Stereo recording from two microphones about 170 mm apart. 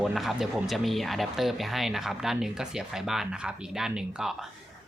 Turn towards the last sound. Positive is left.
turn(degrees=-5)  # may be behind; listen again after turning